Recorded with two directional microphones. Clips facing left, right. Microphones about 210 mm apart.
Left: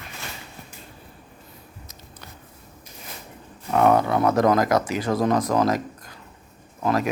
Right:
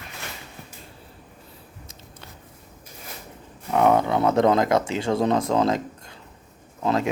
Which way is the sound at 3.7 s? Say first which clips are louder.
Left 1 dB; 20° right (ahead or behind).